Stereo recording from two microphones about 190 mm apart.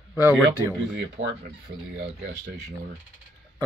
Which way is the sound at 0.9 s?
75° right (ahead or behind).